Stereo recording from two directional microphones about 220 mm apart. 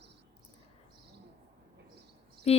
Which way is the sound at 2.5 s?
30° left (ahead or behind).